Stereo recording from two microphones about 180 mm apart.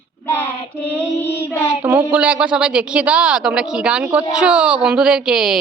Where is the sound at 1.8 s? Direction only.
10° right (ahead or behind).